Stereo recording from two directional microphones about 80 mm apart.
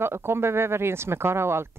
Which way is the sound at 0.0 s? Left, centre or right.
Right.